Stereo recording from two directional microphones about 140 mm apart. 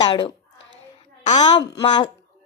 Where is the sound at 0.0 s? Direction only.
35° left (ahead or behind).